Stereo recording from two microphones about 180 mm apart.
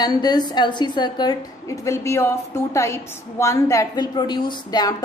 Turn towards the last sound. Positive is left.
turn(degrees=25)  # may be behind; listen again after turning